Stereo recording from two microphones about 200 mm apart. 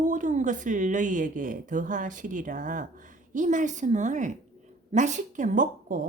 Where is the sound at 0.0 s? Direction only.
40° right (ahead or behind).